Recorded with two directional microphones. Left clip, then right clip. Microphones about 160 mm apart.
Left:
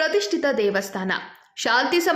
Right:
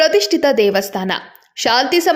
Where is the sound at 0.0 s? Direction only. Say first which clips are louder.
Right 8 dB; 35° right (ahead or behind).